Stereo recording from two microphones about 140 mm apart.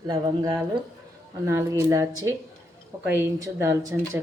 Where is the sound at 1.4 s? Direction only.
20° right (ahead or behind).